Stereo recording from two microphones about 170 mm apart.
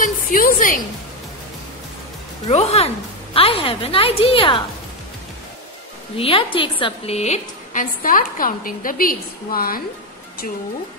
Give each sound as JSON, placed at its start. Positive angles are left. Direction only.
{"t": 0.0, "sound": "a woman's voice", "side_deg": 55}
{"t": 2.4, "sound": "a woman's voice", "side_deg": 40}
{"t": 6.1, "sound": "a woman's voice", "side_deg": 35}